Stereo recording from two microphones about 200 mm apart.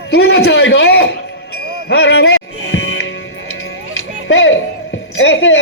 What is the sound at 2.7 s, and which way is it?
Music, 75° left (ahead or behind).